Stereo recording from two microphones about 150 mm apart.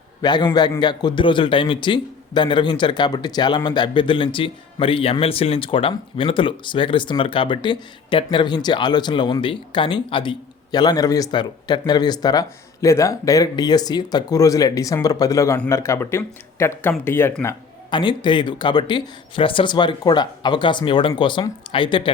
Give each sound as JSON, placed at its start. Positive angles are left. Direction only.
{"t": 0.2, "sound": "speech", "side_deg": 30}
{"t": 17.9, "sound": "speech", "side_deg": 30}